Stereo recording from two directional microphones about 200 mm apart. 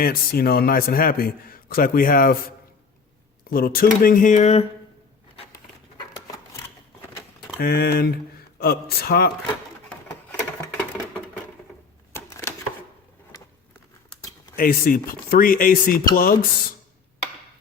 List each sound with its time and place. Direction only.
0.0 s a man's voice: 50° left (ahead or behind)
3.5 s a man's voice: 45° left (ahead or behind)
6.0 s a sound: 15° left (ahead or behind)
7.6 s a man's voice: 50° left (ahead or behind)
12.1 s typewriter: 10° left (ahead or behind)
14.5 s a man's voice: 45° left (ahead or behind)